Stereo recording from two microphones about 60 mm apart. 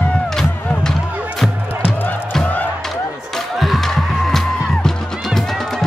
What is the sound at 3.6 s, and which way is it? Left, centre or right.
Music, centre.